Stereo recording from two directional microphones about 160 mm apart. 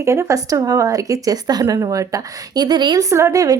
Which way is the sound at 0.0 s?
15° right (ahead or behind).